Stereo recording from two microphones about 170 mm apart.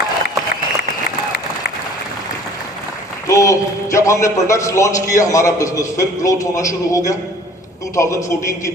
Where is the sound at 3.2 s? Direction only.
20° left (ahead or behind).